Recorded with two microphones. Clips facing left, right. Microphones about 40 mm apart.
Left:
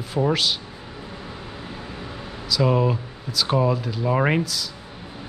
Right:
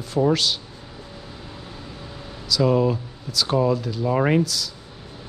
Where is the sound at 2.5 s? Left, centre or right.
Centre.